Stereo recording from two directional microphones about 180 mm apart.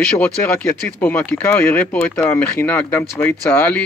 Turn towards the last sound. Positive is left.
turn(degrees=10)  # may be behind; listen again after turning